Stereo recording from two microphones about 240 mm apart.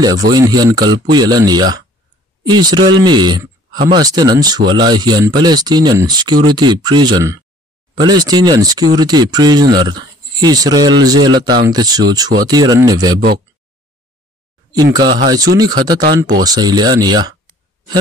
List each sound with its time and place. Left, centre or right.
0.0 s speech: centre
14.7 s speech: centre